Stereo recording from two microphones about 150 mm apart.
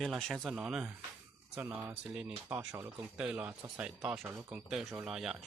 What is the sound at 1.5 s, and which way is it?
Speech, 15° right (ahead or behind).